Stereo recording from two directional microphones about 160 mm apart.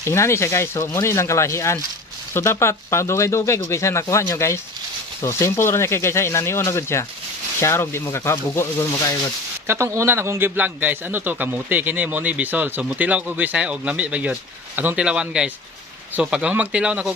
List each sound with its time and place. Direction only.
0.0 s speech: 15° left (ahead or behind)
9.7 s a man's voice: 15° right (ahead or behind)